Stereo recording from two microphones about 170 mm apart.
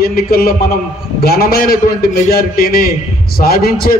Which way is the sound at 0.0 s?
60° left (ahead or behind).